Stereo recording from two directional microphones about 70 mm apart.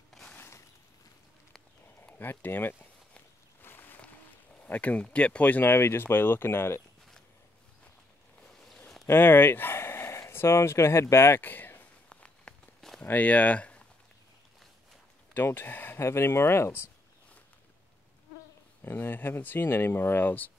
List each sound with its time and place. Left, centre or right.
2.0 s speech: left
3.6 s boat: left
4.6 s speech: left
8.5 s a sound: centre
9.0 s speech: left
12.1 s a sound: centre
13.0 s speech: left
15.3 s speech: left
18.8 s speech: left